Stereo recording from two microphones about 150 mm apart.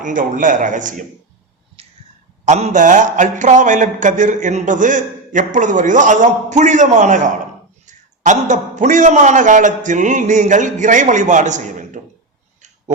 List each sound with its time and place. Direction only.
0.0 s speech: 60° right (ahead or behind)
1.8 s a sound: 40° right (ahead or behind)
2.4 s speech: 50° right (ahead or behind)